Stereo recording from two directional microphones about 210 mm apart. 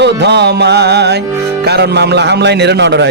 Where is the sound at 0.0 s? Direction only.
55° right (ahead or behind).